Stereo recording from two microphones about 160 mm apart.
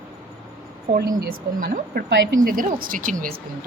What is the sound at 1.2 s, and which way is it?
Speech, 65° right (ahead or behind).